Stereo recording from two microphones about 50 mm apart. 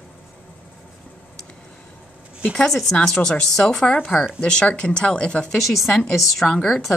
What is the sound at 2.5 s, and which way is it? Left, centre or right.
Speech, centre.